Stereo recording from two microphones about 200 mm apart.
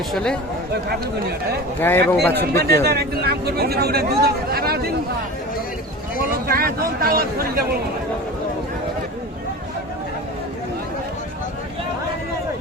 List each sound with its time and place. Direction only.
0.1 s speech: 5° left (ahead or behind)
1.8 s speech: 10° left (ahead or behind)
2.8 s speech: 50° right (ahead or behind)
6.5 s speech: 45° right (ahead or behind)